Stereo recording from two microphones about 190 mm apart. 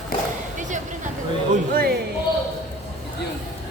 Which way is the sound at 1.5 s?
50° right (ahead or behind).